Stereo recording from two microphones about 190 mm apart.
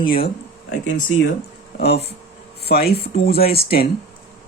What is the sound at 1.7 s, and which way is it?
Speech, 60° left (ahead or behind).